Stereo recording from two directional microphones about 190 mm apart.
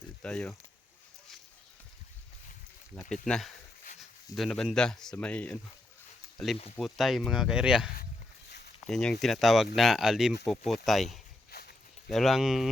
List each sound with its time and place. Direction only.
0.2 s speech: 5° left (ahead or behind)
3.0 s speech: 5° left (ahead or behind)
8.4 s a sound: 60° left (ahead or behind)
8.9 s speech: 5° left (ahead or behind)
11.5 s walk: 55° left (ahead or behind)
12.0 s speech: centre (ahead or behind)